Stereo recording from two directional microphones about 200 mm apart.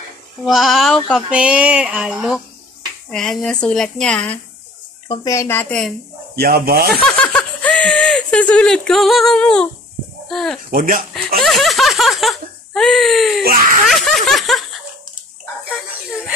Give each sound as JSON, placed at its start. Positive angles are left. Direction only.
{"t": 0.5, "sound": "a woman's voice", "side_deg": 0}
{"t": 5.0, "sound": "speech", "side_deg": 20}
{"t": 6.3, "sound": "speech", "side_deg": -50}
{"t": 7.0, "sound": "a woman's voice", "side_deg": 5}
{"t": 10.7, "sound": "speech", "side_deg": -45}
{"t": 11.4, "sound": "speech", "side_deg": 0}
{"t": 13.8, "sound": "a sound", "side_deg": 0}